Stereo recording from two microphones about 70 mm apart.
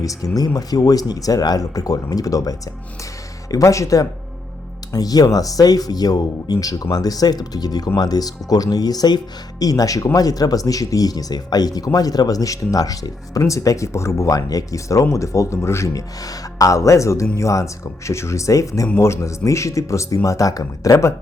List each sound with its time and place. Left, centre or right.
0.0 s speech: left
0.3 s speech: left
4.9 s speech: left